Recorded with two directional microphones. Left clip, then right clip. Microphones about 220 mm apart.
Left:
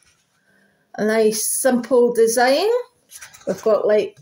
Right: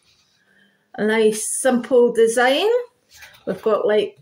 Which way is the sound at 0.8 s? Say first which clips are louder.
Even; centre (ahead or behind).